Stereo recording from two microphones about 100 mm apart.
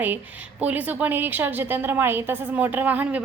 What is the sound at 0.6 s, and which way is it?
A woman's voice, 15° right (ahead or behind).